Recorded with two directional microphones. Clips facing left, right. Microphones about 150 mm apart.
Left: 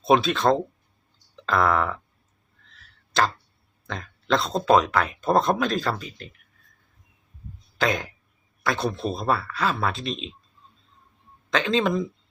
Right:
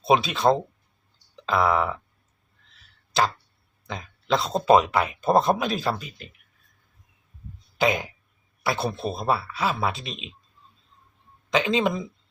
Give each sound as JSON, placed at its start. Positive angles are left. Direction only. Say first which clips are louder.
{"t": 0.0, "sound": "speech", "louder": "left 1 dB", "side_deg": -5}
{"t": 3.1, "sound": "tick-tock", "louder": "even", "side_deg": -5}
{"t": 3.8, "sound": "speech", "louder": "left 1 dB", "side_deg": -5}
{"t": 7.8, "sound": "speech", "louder": "right 2 dB", "side_deg": -5}
{"t": 11.5, "sound": "speech", "louder": "even", "side_deg": -5}